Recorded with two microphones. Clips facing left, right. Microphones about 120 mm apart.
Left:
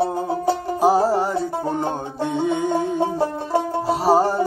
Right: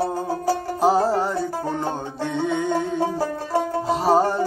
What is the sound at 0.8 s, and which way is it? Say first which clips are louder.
Music: left 2 dB; 10° left (ahead or behind).